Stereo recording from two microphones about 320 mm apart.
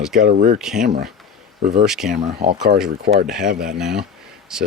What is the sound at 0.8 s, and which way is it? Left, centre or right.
Speech, right.